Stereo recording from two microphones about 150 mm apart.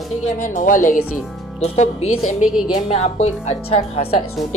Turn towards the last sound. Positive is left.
turn(degrees=40)  # may be behind; listen again after turning